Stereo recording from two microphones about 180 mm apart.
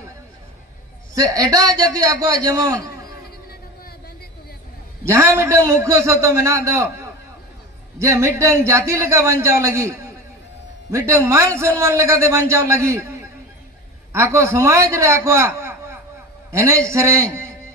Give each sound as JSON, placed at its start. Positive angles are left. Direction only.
{"t": 1.1, "sound": "a man's voice", "side_deg": -20}
{"t": 5.0, "sound": "a man's voice", "side_deg": -15}
{"t": 14.1, "sound": "a man's voice", "side_deg": -15}